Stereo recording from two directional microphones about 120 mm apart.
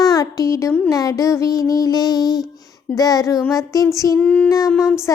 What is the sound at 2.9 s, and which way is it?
Speech, 30° left (ahead or behind).